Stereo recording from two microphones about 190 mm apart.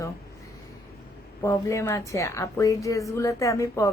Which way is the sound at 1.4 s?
15° left (ahead or behind).